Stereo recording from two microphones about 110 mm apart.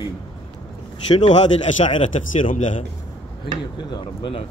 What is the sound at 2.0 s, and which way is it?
Speech, 90° left.